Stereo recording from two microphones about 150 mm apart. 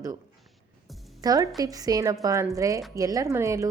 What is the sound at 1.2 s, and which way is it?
A woman's voice, 25° right (ahead or behind).